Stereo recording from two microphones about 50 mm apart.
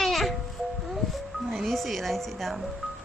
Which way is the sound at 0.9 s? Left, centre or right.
Centre.